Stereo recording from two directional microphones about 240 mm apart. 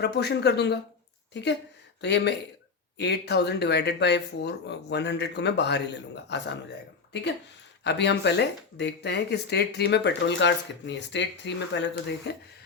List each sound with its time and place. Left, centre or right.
0.0 s speech: left
7.9 s speech: left